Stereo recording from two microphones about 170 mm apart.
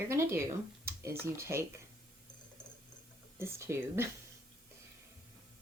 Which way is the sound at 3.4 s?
15° right (ahead or behind).